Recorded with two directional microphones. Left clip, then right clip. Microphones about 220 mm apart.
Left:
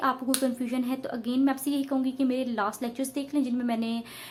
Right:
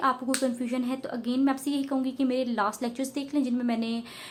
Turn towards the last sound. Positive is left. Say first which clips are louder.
# even
turn(degrees=0)  # may be behind; listen again after turning